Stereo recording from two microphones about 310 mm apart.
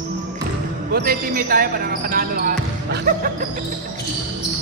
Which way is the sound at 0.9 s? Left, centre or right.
Right.